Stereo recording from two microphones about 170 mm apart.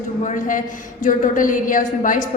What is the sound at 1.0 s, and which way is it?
A woman's voice, 50° left (ahead or behind).